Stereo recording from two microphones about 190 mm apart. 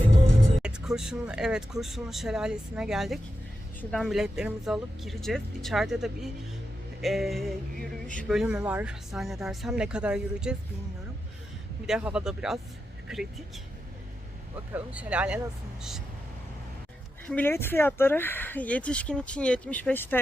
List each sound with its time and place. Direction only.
0.6 s speech: 5° right (ahead or behind)
11.9 s speech: 5° right (ahead or behind)
14.7 s speech: 10° right (ahead or behind)
17.2 s speech: 10° left (ahead or behind)